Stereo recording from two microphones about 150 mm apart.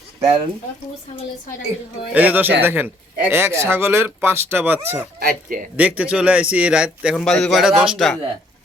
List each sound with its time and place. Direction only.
0.2 s speech: 40° right (ahead or behind)
2.1 s a man's voice: 10° right (ahead or behind)
5.2 s speech: 70° right (ahead or behind)
5.7 s a man's voice: 10° right (ahead or behind)